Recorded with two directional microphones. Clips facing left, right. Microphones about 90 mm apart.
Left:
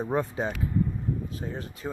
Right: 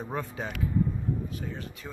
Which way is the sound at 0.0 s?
30° left (ahead or behind).